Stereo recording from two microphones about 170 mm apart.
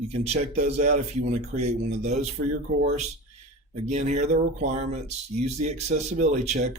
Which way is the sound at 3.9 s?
40° right (ahead or behind).